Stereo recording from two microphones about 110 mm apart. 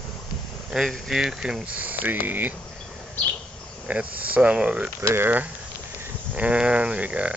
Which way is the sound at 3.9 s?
15° right (ahead or behind).